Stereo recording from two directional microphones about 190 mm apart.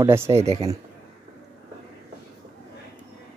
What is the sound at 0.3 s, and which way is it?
Speech, 35° right (ahead or behind).